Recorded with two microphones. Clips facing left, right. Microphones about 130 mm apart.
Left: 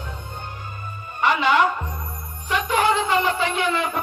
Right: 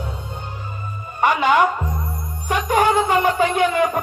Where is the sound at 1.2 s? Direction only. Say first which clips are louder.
Right 3 dB; 45° right (ahead or behind).